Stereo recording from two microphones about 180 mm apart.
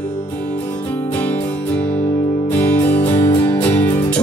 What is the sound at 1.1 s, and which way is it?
Music, 10° left (ahead or behind).